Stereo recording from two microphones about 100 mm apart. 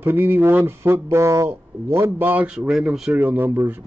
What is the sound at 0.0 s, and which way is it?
A man's voice, 20° right (ahead or behind).